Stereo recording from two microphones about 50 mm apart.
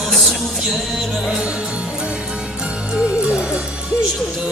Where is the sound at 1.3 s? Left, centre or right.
Centre.